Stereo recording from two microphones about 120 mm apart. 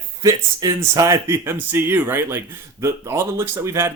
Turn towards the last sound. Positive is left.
turn(degrees=-20)  # may be behind; listen again after turning